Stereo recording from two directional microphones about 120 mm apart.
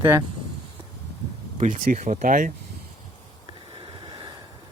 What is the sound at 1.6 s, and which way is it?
Speech, 90° right.